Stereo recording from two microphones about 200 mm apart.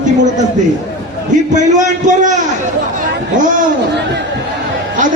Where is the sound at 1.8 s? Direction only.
40° right (ahead or behind).